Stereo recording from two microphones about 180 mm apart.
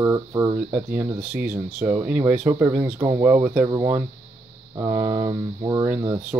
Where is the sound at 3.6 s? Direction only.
20° right (ahead or behind).